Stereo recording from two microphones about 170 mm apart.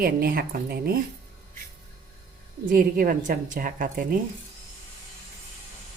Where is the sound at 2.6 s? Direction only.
55° right (ahead or behind).